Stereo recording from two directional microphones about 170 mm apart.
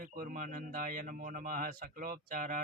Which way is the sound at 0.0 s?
55° right (ahead or behind).